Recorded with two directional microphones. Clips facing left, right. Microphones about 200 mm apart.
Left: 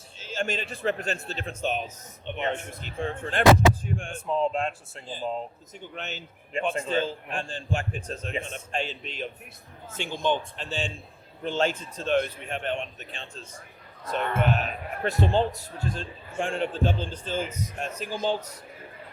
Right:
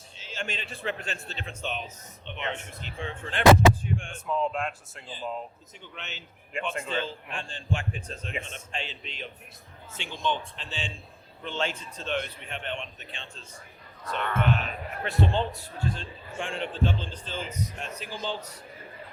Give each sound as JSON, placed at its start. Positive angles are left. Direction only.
{"t": 0.2, "sound": "a man's voice", "side_deg": 45}
{"t": 5.0, "sound": "speech", "side_deg": 45}